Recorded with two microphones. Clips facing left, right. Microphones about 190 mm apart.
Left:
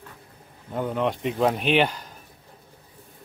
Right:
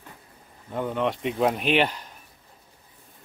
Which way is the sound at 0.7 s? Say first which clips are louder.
Left 1 dB; centre (ahead or behind).